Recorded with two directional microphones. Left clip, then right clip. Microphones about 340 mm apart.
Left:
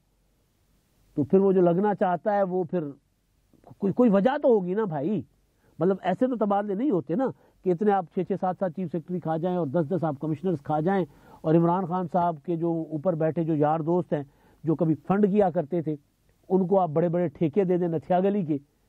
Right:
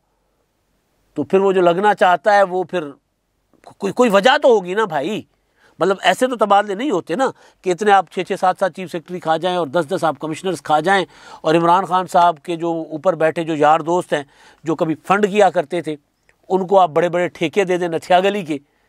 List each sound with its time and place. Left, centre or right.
1.1 s a man's voice: centre
12.7 s speech: centre
13.0 s a man's voice: centre